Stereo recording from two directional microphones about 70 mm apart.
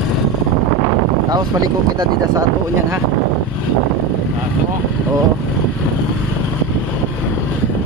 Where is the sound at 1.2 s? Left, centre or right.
Right.